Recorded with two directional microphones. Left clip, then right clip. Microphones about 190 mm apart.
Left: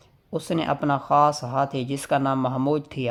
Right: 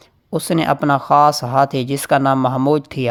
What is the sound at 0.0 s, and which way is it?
Speech, 30° right (ahead or behind).